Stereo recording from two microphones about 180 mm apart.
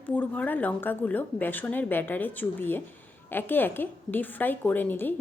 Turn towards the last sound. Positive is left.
turn(degrees=10)  # may be behind; listen again after turning